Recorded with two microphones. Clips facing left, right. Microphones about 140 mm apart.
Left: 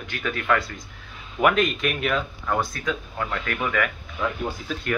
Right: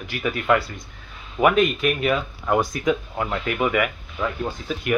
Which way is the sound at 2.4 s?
15° right (ahead or behind).